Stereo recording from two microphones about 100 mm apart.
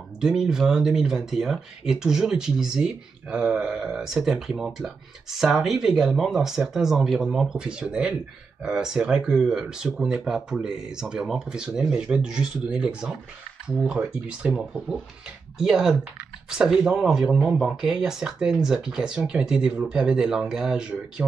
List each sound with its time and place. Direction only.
0.2 s speech: 5° right (ahead or behind)